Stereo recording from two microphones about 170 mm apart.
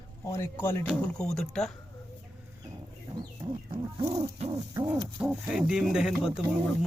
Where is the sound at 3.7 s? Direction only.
30° right (ahead or behind).